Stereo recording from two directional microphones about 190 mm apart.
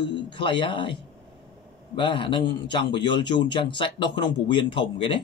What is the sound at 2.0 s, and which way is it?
Speech, 25° left (ahead or behind).